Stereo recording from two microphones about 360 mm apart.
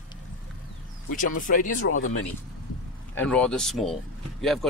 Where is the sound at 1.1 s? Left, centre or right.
Left.